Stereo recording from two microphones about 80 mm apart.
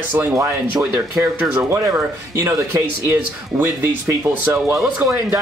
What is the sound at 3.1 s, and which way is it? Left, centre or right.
Speech, right.